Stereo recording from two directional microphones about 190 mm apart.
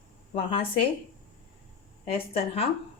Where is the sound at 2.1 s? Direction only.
30° left (ahead or behind).